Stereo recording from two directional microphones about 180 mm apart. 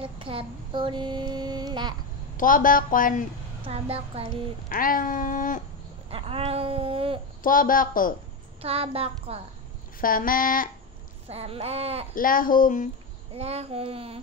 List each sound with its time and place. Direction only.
0.0 s child singing: 30° right (ahead or behind)
2.3 s babbling: 50° left (ahead or behind)
3.6 s speech: 35° right (ahead or behind)
4.6 s babbling: 50° left (ahead or behind)
6.0 s babbling: 30° right (ahead or behind)
7.4 s babbling: 50° left (ahead or behind)
8.5 s speech: 35° right (ahead or behind)
9.9 s babbling: 50° left (ahead or behind)
11.2 s speech: 35° right (ahead or behind)
12.2 s babbling: 50° left (ahead or behind)
13.3 s speech: 35° right (ahead or behind)